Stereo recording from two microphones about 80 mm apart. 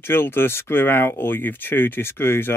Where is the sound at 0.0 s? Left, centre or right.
Left.